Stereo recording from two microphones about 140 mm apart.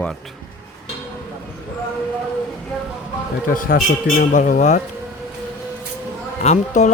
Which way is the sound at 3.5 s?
90° left.